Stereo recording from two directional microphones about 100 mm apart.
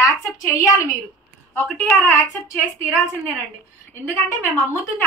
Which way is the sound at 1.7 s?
10° left (ahead or behind).